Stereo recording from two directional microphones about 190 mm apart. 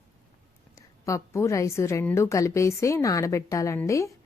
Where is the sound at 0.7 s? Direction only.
15° left (ahead or behind).